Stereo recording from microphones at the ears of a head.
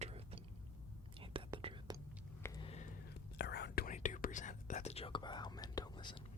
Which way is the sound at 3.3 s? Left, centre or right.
Left.